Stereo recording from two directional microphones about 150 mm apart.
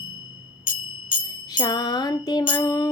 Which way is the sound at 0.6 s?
30° left (ahead or behind).